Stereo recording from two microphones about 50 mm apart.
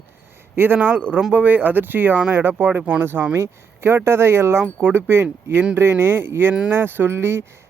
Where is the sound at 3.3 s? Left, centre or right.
Right.